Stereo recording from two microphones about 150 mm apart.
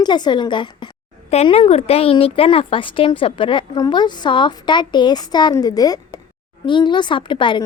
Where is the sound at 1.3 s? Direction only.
45° left (ahead or behind).